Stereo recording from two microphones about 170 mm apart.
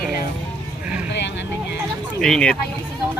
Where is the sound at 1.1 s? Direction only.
90° left.